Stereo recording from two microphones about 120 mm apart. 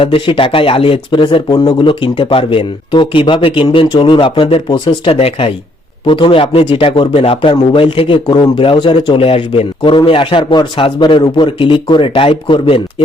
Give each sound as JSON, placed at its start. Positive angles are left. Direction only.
{"t": 0.0, "sound": "speech", "side_deg": 45}